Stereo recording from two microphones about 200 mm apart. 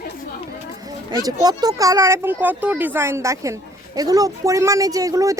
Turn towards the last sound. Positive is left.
turn(degrees=-15)  # may be behind; listen again after turning